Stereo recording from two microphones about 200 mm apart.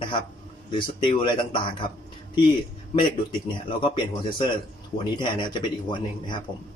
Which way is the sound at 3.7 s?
25° left (ahead or behind).